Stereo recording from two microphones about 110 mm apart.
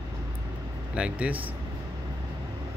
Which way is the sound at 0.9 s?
10° right (ahead or behind).